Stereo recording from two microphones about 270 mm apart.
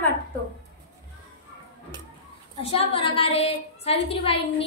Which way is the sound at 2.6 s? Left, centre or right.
Left.